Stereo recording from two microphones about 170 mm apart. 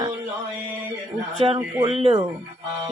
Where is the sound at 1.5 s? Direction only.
30° right (ahead or behind).